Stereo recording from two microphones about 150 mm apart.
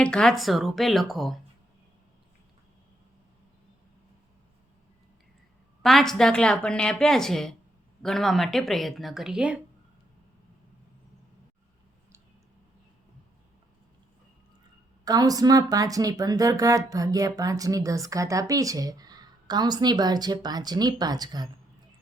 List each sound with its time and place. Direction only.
0.0 s a woman's voice: 5° left (ahead or behind)
5.8 s a woman's voice: centre (ahead or behind)
15.0 s speech: 25° right (ahead or behind)